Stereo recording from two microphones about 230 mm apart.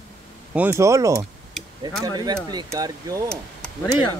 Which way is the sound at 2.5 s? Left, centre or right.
Centre.